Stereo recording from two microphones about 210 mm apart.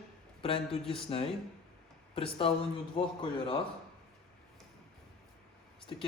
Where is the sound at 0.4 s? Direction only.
25° left (ahead or behind).